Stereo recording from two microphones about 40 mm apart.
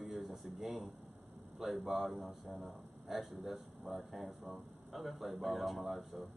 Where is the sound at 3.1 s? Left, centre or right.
Centre.